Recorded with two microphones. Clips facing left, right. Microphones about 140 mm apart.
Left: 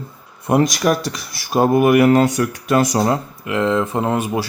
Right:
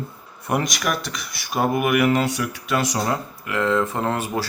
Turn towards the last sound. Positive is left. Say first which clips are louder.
# left 4 dB
turn(degrees=15)  # may be behind; listen again after turning